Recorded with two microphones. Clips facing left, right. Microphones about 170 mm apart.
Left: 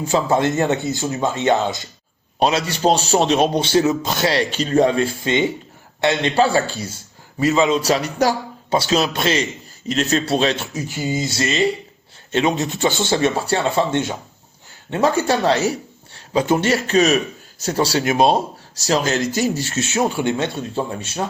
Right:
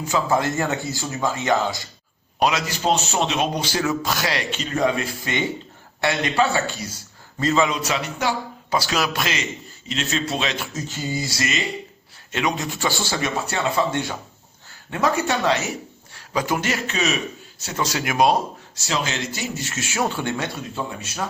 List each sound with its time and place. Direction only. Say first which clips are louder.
0.0 s a man's voice: left 4 dB; 25° left (ahead or behind)
7.3 s a man's voice: left 4 dB; 15° left (ahead or behind)
7.8 s speech: left 7 dB; 35° left (ahead or behind)
8.8 s a man's voice: left 7 dB; 25° left (ahead or behind)
10.7 s a man's voice: left 4 dB; 10° left (ahead or behind)
18.8 s a man's voice: left 7 dB; 40° left (ahead or behind); by 20.1 s 25° left (ahead or behind)
20.1 s a man's voice: left 5 dB; 10° left (ahead or behind)
20.3 s speech: left 6 dB; 25° left (ahead or behind)